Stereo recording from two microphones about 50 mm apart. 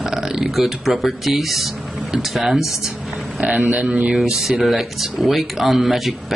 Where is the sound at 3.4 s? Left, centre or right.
Right.